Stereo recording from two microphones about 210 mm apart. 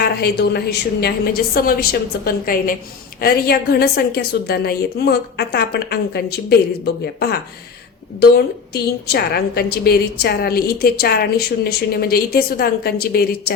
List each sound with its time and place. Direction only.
0.0 s a woman's voice: 50° left (ahead or behind)
8.7 s a woman's voice: 50° left (ahead or behind)